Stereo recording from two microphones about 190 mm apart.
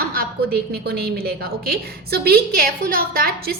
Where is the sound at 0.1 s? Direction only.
55° right (ahead or behind).